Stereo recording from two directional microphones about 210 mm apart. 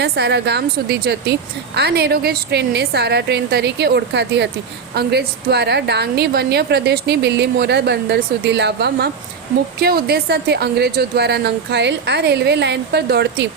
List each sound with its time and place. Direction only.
0.0 s a woman's voice: 50° right (ahead or behind)